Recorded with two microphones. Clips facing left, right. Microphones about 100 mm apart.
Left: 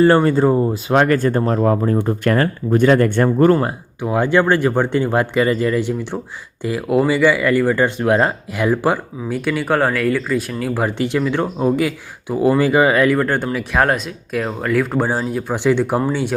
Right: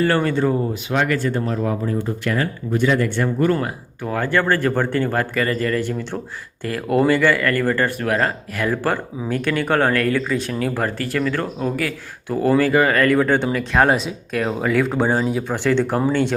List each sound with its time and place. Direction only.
0.0 s speech: 25° left (ahead or behind)
0.9 s speech: 45° left (ahead or behind)
4.0 s speech: 15° left (ahead or behind)
7.9 s speech: 20° left (ahead or behind); by 10.8 s 5° left (ahead or behind)
10.8 s speech: 20° left (ahead or behind)
13.1 s speech: 5° left (ahead or behind)
15.4 s speech: 15° left (ahead or behind)